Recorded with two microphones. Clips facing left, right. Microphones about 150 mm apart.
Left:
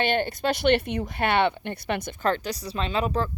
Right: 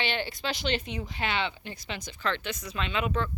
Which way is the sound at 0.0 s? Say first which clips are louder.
Left 7 dB; 50° left (ahead or behind).